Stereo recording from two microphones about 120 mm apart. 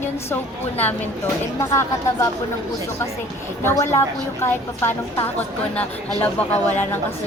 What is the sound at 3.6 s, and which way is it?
A man's voice, 25° left (ahead or behind).